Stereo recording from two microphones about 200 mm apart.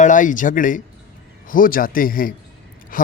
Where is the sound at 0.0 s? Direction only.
40° left (ahead or behind).